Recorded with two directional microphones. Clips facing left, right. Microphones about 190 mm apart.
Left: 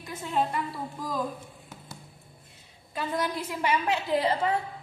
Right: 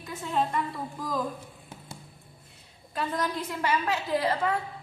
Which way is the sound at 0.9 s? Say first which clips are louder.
Right 2 dB; centre (ahead or behind).